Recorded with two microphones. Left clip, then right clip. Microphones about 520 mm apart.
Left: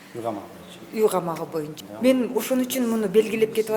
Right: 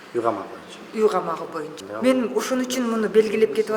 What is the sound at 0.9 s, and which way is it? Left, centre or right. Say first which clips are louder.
A man's voice: right 1 dB; left.